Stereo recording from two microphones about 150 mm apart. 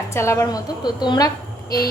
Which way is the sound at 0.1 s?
20° left (ahead or behind).